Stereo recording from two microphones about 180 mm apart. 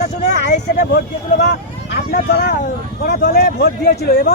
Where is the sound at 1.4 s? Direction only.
70° left (ahead or behind).